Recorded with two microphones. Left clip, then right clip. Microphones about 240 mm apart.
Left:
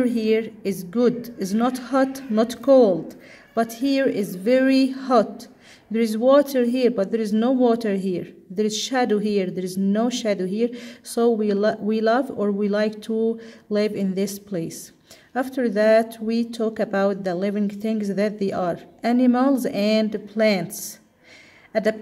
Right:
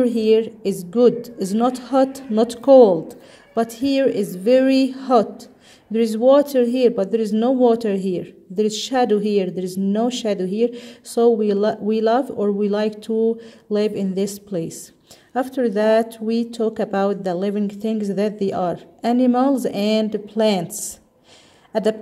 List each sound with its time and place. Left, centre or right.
0.0 s speech: centre